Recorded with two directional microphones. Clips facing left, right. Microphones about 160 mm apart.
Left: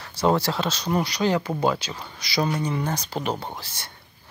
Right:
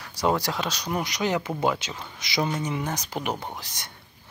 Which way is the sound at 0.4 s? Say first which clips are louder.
Left 3 dB; 15° right (ahead or behind).